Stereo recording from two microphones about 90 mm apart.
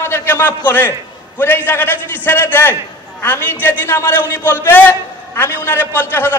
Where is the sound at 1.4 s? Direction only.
25° left (ahead or behind).